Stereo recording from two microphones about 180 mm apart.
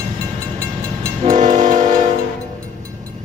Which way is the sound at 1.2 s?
40° right (ahead or behind).